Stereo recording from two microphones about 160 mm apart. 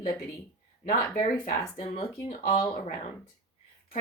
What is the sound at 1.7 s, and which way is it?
Speech, 35° left (ahead or behind).